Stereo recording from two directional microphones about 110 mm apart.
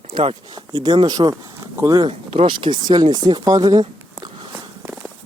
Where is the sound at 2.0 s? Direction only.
55° right (ahead or behind); by 4.3 s 40° right (ahead or behind).